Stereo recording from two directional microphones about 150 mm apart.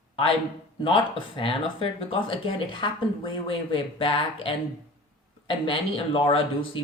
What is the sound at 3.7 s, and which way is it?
Speech, 35° left (ahead or behind).